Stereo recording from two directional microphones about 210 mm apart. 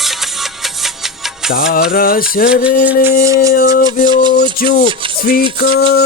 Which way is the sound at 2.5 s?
5° right (ahead or behind).